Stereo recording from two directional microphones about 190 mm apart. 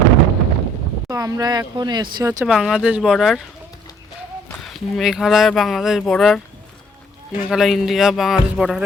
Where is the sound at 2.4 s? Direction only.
Centre (ahead or behind).